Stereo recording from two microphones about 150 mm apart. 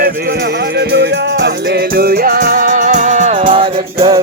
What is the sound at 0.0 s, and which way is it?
Music, 90° right.